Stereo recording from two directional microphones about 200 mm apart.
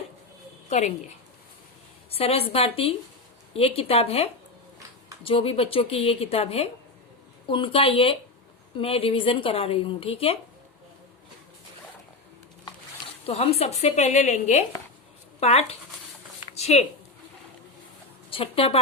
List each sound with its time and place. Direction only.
0.7 s a woman's voice: 35° left (ahead or behind)
2.0 s a woman's voice: 30° left (ahead or behind)
13.2 s a woman's voice: 30° left (ahead or behind)
16.6 s a sound: 30° left (ahead or behind)
18.3 s speech: 30° left (ahead or behind)